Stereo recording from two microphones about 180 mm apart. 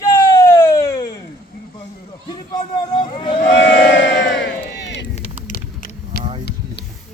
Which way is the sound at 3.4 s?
75° left (ahead or behind).